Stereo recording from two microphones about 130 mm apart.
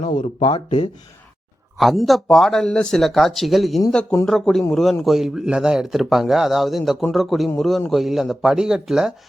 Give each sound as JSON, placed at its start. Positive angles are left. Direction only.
{"t": 0.0, "sound": "speech", "side_deg": 75}
{"t": 0.3, "sound": "speech", "side_deg": 40}
{"t": 1.8, "sound": "speech", "side_deg": 0}